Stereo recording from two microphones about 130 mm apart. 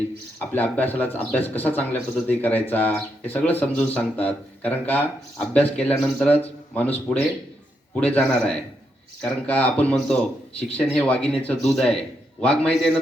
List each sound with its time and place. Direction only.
0.3 s speech: 15° left (ahead or behind)